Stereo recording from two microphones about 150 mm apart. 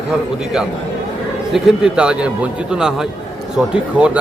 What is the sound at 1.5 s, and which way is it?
A man's voice, 5° right (ahead or behind).